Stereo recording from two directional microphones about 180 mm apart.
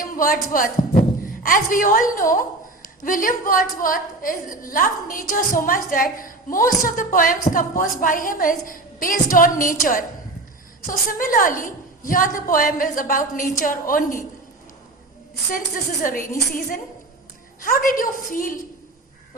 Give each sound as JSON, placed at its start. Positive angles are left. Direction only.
{"t": 0.0, "sound": "a man's voice", "side_deg": 50}
{"t": 15.4, "sound": "a woman's voice", "side_deg": 50}
{"t": 17.6, "sound": "a woman's voice", "side_deg": 50}